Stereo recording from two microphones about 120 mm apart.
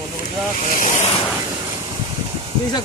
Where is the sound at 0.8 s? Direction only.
75° left (ahead or behind).